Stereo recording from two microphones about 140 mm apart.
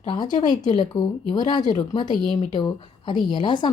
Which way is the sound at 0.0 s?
35° left (ahead or behind).